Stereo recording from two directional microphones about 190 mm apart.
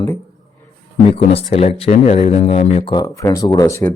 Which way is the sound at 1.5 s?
30° left (ahead or behind).